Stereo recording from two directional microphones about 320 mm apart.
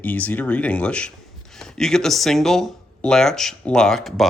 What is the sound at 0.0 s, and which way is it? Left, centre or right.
Speech, centre.